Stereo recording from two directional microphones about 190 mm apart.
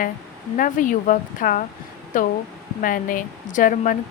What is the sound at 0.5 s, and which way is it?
Speech, 45° left (ahead or behind).